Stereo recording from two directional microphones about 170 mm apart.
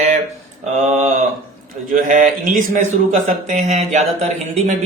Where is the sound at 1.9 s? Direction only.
50° right (ahead or behind).